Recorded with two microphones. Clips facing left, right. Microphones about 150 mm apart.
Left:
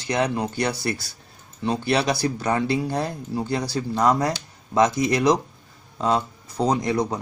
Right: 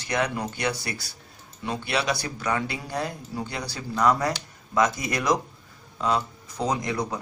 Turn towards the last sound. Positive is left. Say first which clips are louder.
# left 5 dB
turn(degrees=25)  # may be behind; listen again after turning